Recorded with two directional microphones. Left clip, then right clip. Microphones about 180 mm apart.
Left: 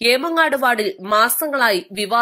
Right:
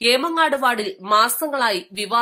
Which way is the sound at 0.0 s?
20° left (ahead or behind).